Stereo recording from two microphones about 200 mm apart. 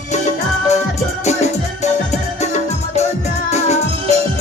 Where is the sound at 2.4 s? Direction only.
35° left (ahead or behind).